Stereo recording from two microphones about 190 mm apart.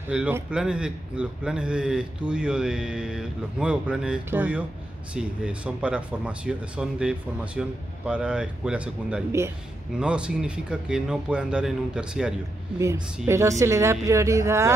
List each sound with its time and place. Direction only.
0.1 s a man's voice: 5° right (ahead or behind)
12.7 s speech: 15° right (ahead or behind)